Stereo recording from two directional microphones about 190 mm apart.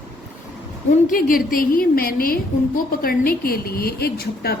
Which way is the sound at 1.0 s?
45° left (ahead or behind).